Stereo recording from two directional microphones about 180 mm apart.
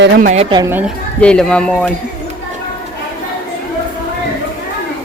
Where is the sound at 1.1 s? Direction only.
5° left (ahead or behind).